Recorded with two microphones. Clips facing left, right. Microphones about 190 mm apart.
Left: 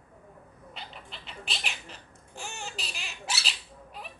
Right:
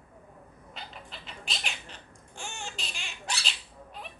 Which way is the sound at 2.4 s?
35° left (ahead or behind).